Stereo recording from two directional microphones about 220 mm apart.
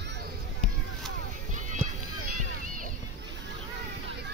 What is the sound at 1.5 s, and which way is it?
Music, 35° right (ahead or behind).